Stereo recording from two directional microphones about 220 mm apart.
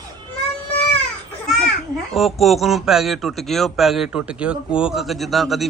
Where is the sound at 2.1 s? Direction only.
Centre (ahead or behind).